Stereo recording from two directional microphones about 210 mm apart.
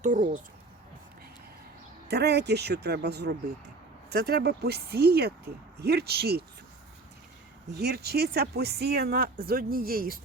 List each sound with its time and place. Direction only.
0.0 s speech: 35° right (ahead or behind)
2.0 s speech: 50° right (ahead or behind)
7.7 s speech: 50° right (ahead or behind)